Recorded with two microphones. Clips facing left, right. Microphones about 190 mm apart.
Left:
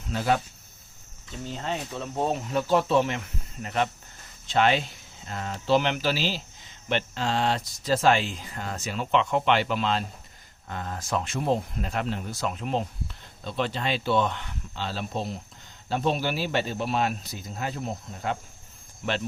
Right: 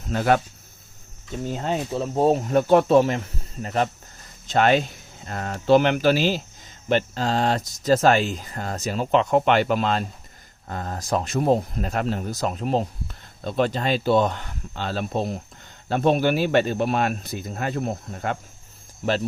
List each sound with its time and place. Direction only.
0.1 s speech: 55° right (ahead or behind)
1.5 s speech: 45° right (ahead or behind)
1.9 s speech: 35° right (ahead or behind); by 3.0 s 55° right (ahead or behind)
3.0 s speech: 40° right (ahead or behind)
6.8 s speech: 40° right (ahead or behind); by 18.3 s 55° right (ahead or behind)